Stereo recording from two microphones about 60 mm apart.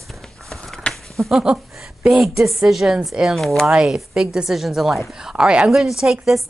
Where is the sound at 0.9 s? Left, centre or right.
Centre.